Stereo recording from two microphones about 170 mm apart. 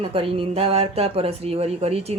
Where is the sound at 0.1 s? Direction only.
35° right (ahead or behind).